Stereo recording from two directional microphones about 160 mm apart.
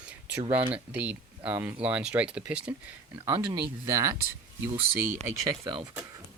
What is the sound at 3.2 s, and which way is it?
Speech, 25° right (ahead or behind).